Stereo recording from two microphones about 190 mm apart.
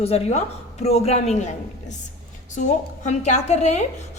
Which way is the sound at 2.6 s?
40° left (ahead or behind).